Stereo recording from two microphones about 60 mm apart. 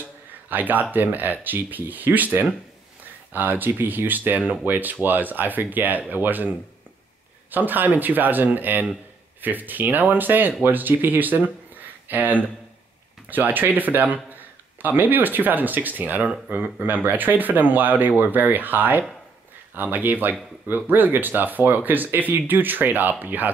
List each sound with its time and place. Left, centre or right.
0.5 s speech: right
7.5 s speech: right